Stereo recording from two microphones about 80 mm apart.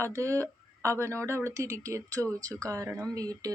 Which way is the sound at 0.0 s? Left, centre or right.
Right.